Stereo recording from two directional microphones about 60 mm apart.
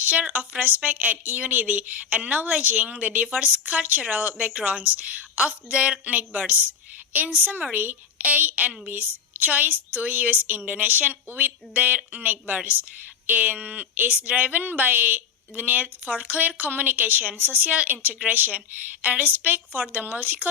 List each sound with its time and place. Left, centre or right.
0.0 s speech: right